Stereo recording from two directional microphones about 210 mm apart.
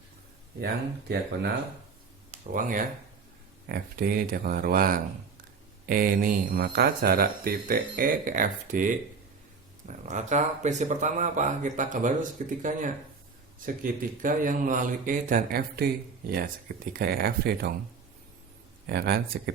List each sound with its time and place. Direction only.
0.6 s speech: 50° right (ahead or behind)
2.3 s speech: 40° right (ahead or behind)
18.9 s speech: 45° right (ahead or behind)